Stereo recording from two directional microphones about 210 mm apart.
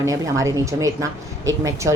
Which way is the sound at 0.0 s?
15° right (ahead or behind).